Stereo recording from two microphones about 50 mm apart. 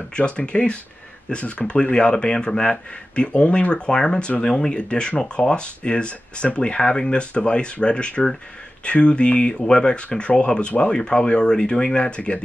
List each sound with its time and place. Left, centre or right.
0.1 s speech: left